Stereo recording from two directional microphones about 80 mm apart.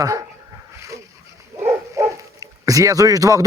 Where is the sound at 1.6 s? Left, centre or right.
Right.